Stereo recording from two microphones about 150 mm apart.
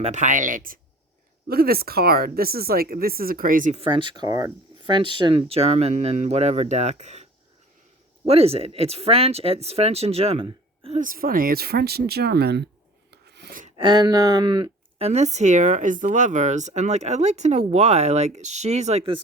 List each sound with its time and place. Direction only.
0.0 s speech: 55° right (ahead or behind)
1.5 s speech: 90° right; by 3.8 s 60° right (ahead or behind)
3.8 s speech: 35° right (ahead or behind)
11.0 s speech: 70° right (ahead or behind); by 12.6 s 90° right
13.1 s filing: 90° right
13.7 s speech: 30° right (ahead or behind); by 19.1 s 45° right (ahead or behind)